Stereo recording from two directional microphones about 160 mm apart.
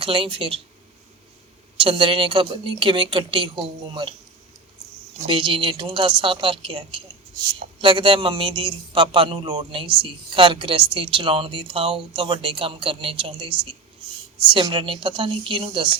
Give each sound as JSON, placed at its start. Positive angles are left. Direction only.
{"t": 0.0, "sound": "a man's voice", "side_deg": -35}
{"t": 1.8, "sound": "a man's voice", "side_deg": -35}
{"t": 5.2, "sound": "a man's voice", "side_deg": -30}